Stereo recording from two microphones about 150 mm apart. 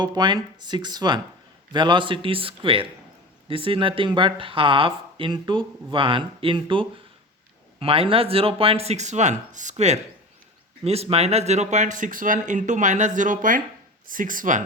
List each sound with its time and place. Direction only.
0.0 s speech: 30° right (ahead or behind); by 14.6 s 60° right (ahead or behind)